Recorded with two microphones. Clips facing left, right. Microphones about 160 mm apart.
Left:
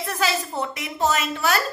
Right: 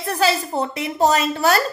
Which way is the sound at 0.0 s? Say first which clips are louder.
Right 5 dB; 35° right (ahead or behind).